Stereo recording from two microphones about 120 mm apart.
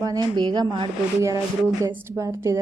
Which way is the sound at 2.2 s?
25° right (ahead or behind).